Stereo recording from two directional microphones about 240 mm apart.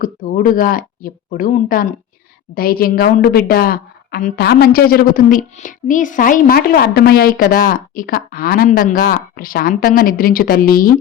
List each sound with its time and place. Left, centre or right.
0.0 s a woman's voice: left